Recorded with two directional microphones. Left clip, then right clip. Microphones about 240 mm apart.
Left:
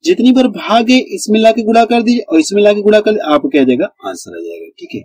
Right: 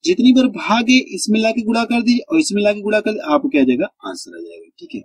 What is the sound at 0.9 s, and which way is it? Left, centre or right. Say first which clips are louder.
Speech: left 4 dB; centre.